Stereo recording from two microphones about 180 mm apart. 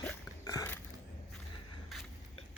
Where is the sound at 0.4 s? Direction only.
15° left (ahead or behind).